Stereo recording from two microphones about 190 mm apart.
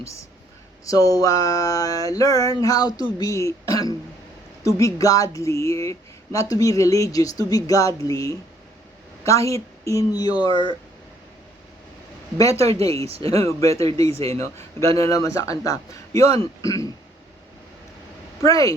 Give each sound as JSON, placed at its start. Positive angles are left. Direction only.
{"t": 0.0, "sound": "speech", "side_deg": 15}
{"t": 0.9, "sound": "a sound", "side_deg": 20}
{"t": 3.2, "sound": "speech", "side_deg": 15}
{"t": 10.5, "sound": "speech", "side_deg": -25}
{"t": 12.4, "sound": "speech", "side_deg": 15}
{"t": 14.1, "sound": "speech", "side_deg": -30}
{"t": 14.3, "sound": "speech", "side_deg": 15}
{"t": 18.4, "sound": "speech", "side_deg": 15}